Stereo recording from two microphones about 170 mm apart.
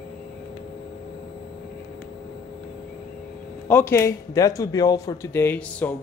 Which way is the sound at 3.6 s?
10° left (ahead or behind).